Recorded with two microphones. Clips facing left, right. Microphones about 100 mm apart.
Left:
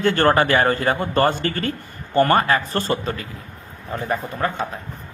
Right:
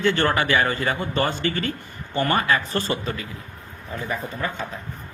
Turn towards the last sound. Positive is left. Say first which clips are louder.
# left 5 dB
turn(degrees=50)  # may be behind; listen again after turning